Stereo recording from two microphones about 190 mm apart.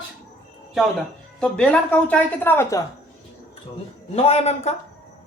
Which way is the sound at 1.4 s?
5° left (ahead or behind).